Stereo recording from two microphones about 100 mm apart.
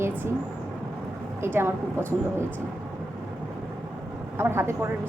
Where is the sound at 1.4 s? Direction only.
25° right (ahead or behind).